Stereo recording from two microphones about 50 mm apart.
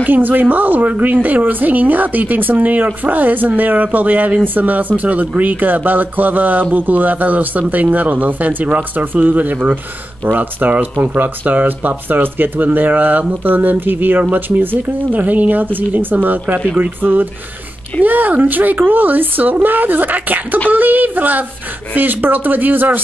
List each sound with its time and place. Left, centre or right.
0.0 s speech: right